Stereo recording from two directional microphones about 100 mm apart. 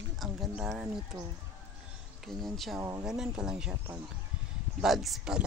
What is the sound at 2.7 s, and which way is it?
Speech, 30° right (ahead or behind).